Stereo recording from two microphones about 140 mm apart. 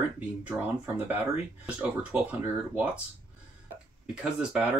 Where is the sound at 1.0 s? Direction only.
10° right (ahead or behind).